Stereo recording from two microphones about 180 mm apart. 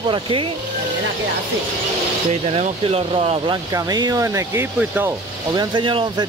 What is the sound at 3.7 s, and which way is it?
Speech, 20° right (ahead or behind).